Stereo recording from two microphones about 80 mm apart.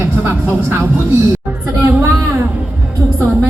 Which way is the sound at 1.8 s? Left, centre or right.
Right.